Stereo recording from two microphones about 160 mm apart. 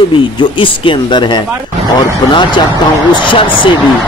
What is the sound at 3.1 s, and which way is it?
Speech, 30° left (ahead or behind).